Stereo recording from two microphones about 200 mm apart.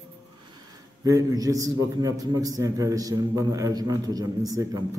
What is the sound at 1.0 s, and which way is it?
A man's voice, 15° right (ahead or behind).